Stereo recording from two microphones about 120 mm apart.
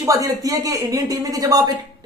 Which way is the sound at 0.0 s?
30° right (ahead or behind).